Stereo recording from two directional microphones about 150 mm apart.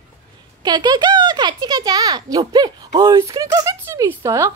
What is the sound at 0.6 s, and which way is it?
Speech, 30° right (ahead or behind).